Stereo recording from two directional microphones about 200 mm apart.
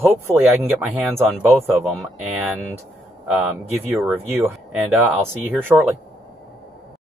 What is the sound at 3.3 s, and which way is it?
Speech, 10° right (ahead or behind).